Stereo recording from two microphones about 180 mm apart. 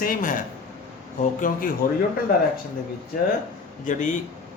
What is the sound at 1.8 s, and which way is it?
Speech, 50° left (ahead or behind).